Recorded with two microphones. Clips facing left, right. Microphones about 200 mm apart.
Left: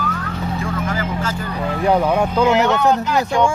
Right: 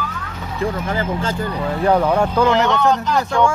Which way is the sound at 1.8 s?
10° left (ahead or behind).